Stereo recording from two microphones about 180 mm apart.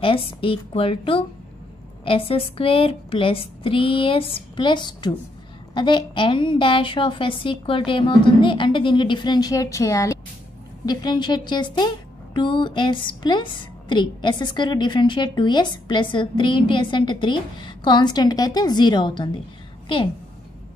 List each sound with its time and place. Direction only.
0.0 s a woman's voice: 30° left (ahead or behind)